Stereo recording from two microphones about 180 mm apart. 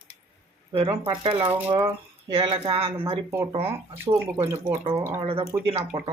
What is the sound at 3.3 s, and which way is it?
Speech, 15° right (ahead or behind).